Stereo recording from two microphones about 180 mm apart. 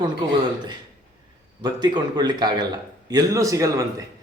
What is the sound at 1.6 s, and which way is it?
A man's voice, 25° right (ahead or behind).